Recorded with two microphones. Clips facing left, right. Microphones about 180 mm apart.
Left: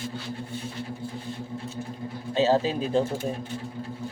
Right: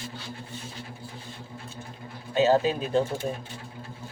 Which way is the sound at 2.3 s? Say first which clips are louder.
Right 1 dB; 30° left (ahead or behind).